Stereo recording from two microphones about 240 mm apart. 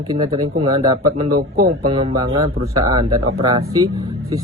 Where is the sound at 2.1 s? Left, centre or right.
Centre.